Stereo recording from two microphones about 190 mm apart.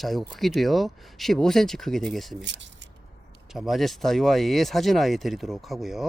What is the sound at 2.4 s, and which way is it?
Speech, 70° right (ahead or behind).